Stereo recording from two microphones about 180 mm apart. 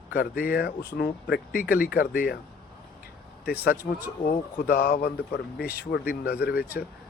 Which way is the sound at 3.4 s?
60° left (ahead or behind).